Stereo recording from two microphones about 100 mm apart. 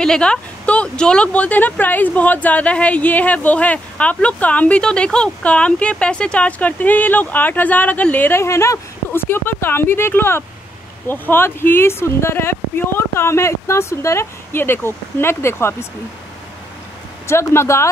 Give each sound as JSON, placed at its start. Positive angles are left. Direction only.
{"t": 0.0, "sound": "speech", "side_deg": 10}
{"t": 17.3, "sound": "speech", "side_deg": 25}